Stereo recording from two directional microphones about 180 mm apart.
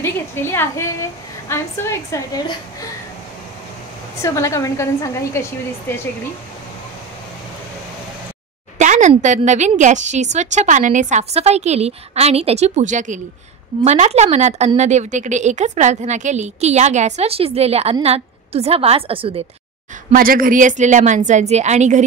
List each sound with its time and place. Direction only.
0.0 s a woman's voice: 15° left (ahead or behind)
4.2 s a woman's voice: 15° left (ahead or behind)
8.7 s a sound: 40° right (ahead or behind)
9.2 s a woman's voice: 45° right (ahead or behind)
20.1 s a woman's voice: 50° right (ahead or behind)